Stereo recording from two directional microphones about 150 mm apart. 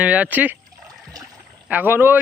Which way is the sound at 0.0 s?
10° right (ahead or behind).